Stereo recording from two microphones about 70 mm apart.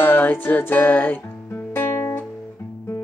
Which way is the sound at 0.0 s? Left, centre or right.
Left.